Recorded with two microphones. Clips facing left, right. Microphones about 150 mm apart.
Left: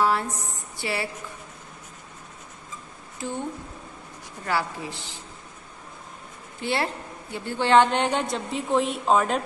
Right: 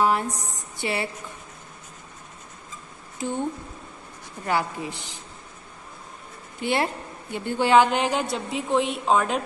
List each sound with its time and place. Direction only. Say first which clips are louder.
0.0 s a woman's voice: right 1 dB; 15° right (ahead or behind)
3.2 s a woman's voice: right 3 dB; 15° right (ahead or behind)
4.5 s a woman's voice: right 2 dB; 20° right (ahead or behind)
6.6 s a woman's voice: right 2 dB; 15° right (ahead or behind); by 9.4 s centre (ahead or behind)